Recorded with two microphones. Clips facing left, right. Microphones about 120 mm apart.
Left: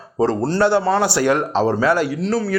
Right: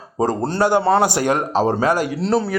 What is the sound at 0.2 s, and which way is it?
Speech, 15° right (ahead or behind).